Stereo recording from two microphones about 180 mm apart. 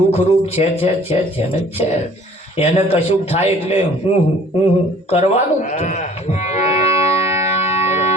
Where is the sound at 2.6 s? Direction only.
35° left (ahead or behind).